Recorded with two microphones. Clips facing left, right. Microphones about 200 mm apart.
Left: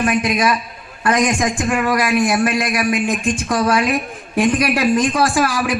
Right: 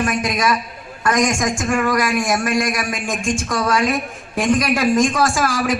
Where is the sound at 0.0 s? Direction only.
45° right (ahead or behind).